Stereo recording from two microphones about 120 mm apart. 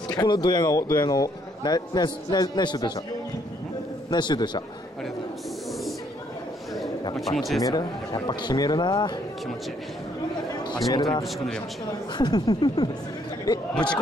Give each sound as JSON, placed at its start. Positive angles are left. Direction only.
{"t": 0.1, "sound": "a man's voice", "side_deg": 35}
{"t": 4.1, "sound": "a man's voice", "side_deg": 35}
{"t": 7.2, "sound": "speech", "side_deg": 0}
{"t": 7.6, "sound": "a man's voice", "side_deg": 35}
{"t": 10.9, "sound": "a man's voice", "side_deg": 30}